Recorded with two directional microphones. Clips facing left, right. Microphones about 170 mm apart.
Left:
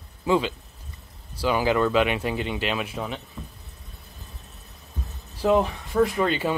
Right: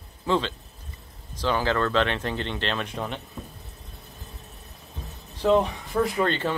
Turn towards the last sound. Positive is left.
turn(degrees=5)  # may be behind; listen again after turning